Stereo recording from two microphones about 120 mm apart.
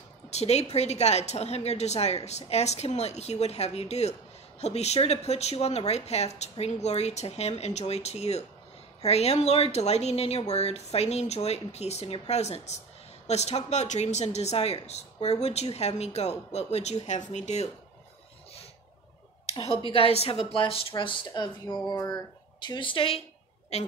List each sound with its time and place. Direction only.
0.3 s a woman's voice: 65° left (ahead or behind)
19.9 s speech: 55° left (ahead or behind)
23.7 s a woman's voice: 65° left (ahead or behind)